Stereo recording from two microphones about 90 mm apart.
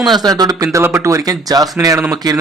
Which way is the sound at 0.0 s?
45° right (ahead or behind).